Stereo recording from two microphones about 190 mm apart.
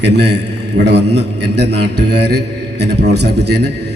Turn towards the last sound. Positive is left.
turn(degrees=-60)  # may be behind; listen again after turning